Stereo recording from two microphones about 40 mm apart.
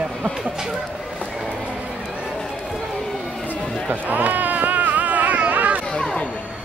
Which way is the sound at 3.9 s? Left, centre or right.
Right.